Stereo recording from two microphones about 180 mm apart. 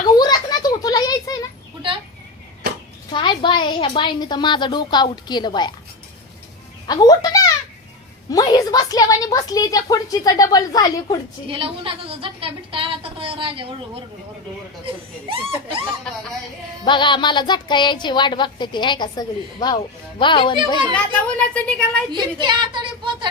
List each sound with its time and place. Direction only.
0.2 s children playing: 20° left (ahead or behind)
3.1 s a woman's voice: 25° left (ahead or behind)
6.8 s a woman's voice: 20° left (ahead or behind)
11.4 s a woman's voice: 30° right (ahead or behind)
15.3 s speech: 30° right (ahead or behind)
16.8 s a woman's voice: 25° left (ahead or behind)
20.9 s speech: 5° left (ahead or behind)
22.1 s a woman's voice: 25° right (ahead or behind)